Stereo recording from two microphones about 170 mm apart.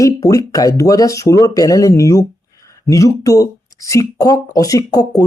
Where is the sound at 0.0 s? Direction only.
20° left (ahead or behind).